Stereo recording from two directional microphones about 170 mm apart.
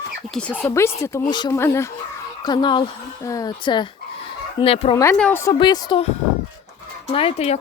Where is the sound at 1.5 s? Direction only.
15° left (ahead or behind).